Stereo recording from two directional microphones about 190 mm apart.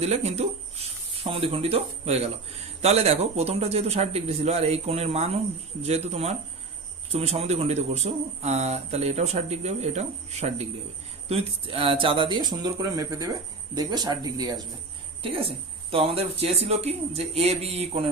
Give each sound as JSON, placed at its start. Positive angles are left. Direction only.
{"t": 0.0, "sound": "speech", "side_deg": -35}